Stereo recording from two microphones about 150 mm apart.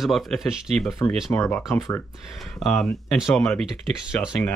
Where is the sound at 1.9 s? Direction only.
Centre (ahead or behind).